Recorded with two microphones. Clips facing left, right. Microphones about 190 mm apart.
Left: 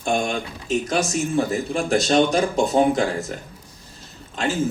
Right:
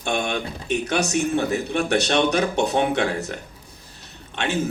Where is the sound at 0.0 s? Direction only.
70° right (ahead or behind).